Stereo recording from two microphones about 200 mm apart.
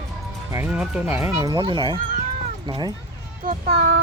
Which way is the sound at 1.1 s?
15° right (ahead or behind).